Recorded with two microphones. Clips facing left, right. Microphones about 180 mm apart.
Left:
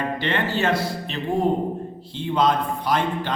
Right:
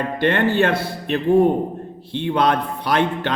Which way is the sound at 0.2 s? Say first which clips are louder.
Right 10 dB; 55° right (ahead or behind).